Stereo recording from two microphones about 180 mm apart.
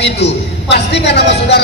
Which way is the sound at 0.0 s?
70° left (ahead or behind).